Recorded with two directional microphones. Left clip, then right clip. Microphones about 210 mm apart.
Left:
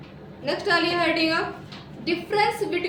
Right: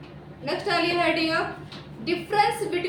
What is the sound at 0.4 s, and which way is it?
A woman's voice, 15° left (ahead or behind).